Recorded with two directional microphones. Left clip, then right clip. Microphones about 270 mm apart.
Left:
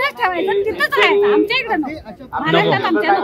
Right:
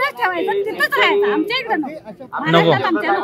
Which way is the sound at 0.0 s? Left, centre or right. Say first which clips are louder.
Left 1 dB; centre.